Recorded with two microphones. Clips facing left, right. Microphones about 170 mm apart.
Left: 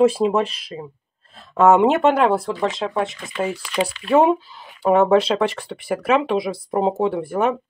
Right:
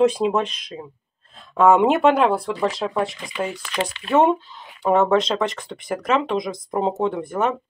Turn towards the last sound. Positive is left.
turn(degrees=5)  # may be behind; listen again after turning